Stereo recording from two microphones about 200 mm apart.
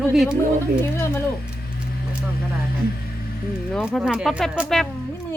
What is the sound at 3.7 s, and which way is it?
Speech, centre (ahead or behind).